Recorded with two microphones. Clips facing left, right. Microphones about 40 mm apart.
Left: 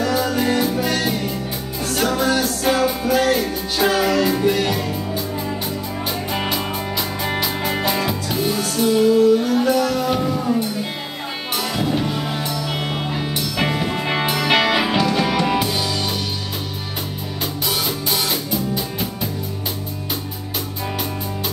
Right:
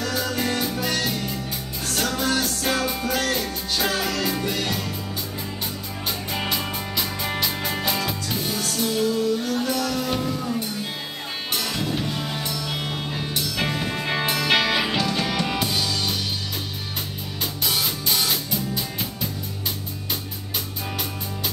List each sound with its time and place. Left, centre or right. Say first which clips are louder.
0.0 s music: left 6 dB; centre
6.3 s music: left 3 dB; centre
17.6 s music: left 2 dB; centre